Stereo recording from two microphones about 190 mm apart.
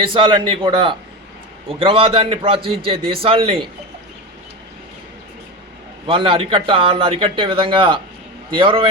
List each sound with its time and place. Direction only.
0.0 s a man's voice: 25° right (ahead or behind)
6.1 s a man's voice: 25° right (ahead or behind)